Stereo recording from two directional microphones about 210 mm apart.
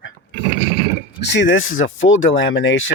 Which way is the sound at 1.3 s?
60° left (ahead or behind).